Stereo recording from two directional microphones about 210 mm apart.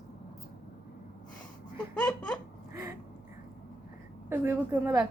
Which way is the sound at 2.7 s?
10° right (ahead or behind).